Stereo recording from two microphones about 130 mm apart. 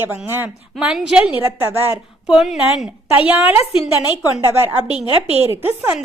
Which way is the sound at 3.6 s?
50° left (ahead or behind).